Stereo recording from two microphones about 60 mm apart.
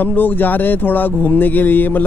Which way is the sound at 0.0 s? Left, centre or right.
Left.